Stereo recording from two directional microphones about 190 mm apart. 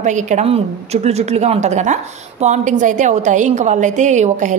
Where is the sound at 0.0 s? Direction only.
40° right (ahead or behind).